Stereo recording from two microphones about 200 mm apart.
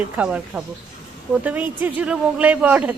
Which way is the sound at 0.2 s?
5° right (ahead or behind).